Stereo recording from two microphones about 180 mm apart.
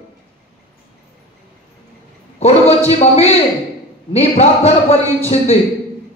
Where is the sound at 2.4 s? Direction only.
35° left (ahead or behind).